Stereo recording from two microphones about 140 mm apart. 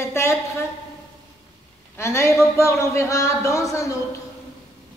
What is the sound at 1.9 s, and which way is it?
A woman's voice, 20° left (ahead or behind).